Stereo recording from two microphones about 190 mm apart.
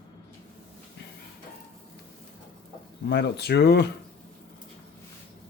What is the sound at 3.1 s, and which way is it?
Speech, 60° left (ahead or behind).